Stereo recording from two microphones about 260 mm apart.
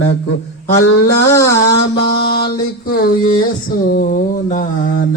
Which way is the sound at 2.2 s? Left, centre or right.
Left.